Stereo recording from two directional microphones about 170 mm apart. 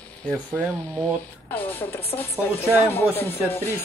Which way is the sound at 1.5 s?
10° left (ahead or behind).